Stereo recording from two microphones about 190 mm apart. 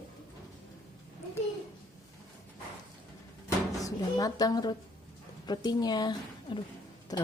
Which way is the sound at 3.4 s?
20° left (ahead or behind).